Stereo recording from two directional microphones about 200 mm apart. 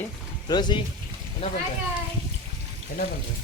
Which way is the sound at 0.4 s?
20° left (ahead or behind).